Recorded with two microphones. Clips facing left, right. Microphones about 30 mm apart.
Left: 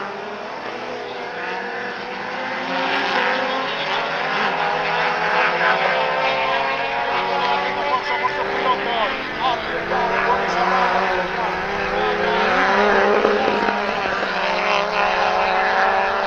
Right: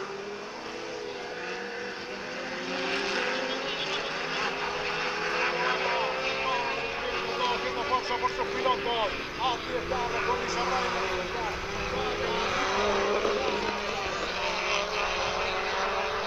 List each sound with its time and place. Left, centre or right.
2.7 s vehicle: left